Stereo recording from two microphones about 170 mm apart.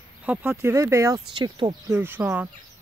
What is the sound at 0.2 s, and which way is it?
Speech, 10° right (ahead or behind).